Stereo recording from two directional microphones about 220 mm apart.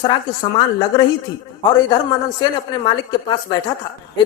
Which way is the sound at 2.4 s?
20° left (ahead or behind).